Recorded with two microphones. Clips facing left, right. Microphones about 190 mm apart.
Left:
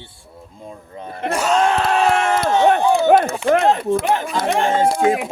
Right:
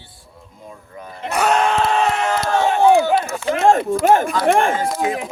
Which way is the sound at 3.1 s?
60° left (ahead or behind).